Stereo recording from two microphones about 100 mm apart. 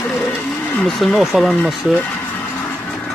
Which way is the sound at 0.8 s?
Centre (ahead or behind).